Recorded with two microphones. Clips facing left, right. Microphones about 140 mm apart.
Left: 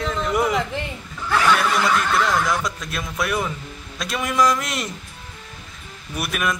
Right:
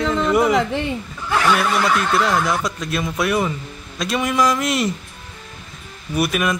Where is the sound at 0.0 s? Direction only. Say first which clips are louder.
Right 5 dB; 80° right.